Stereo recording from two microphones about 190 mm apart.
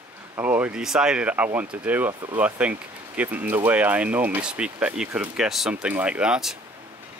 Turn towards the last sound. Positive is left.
turn(degrees=-5)  # may be behind; listen again after turning